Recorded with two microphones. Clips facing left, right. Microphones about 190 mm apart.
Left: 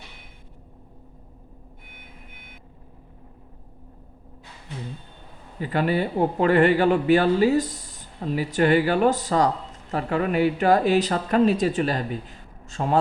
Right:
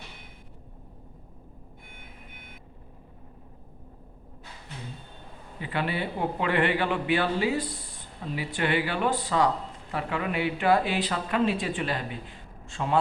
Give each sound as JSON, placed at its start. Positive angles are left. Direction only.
{"t": 5.5, "sound": "a man's voice", "side_deg": 40}